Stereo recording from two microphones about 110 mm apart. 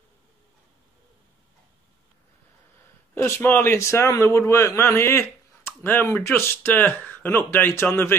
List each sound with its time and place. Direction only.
3.2 s a man's voice: 20° left (ahead or behind)